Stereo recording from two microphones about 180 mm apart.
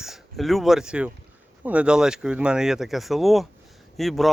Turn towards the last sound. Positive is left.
turn(degrees=0)  # may be behind; listen again after turning